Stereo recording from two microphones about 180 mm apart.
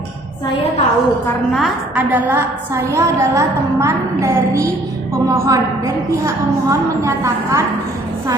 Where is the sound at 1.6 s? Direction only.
5° right (ahead or behind).